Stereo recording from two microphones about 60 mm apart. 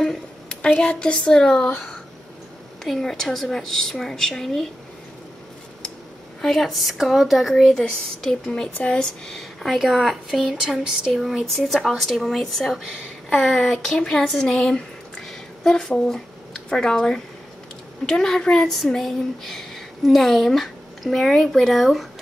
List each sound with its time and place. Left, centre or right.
0.0 s a sound: centre
0.6 s a woman's voice: centre
6.4 s speech: centre
8.2 s a woman's voice: centre
8.7 s a woman's voice: left; by 22.0 s centre